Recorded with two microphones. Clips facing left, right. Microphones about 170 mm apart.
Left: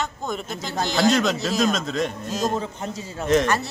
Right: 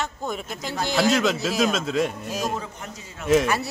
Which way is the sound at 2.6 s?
30° left (ahead or behind).